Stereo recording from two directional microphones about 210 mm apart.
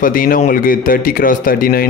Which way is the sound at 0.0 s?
40° left (ahead or behind).